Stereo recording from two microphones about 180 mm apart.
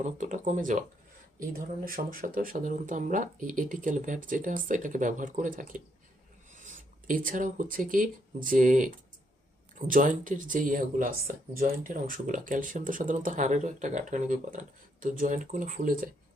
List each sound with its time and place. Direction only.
0.0 s speech: 45° right (ahead or behind)